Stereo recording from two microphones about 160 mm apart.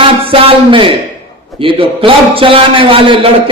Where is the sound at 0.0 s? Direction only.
35° right (ahead or behind).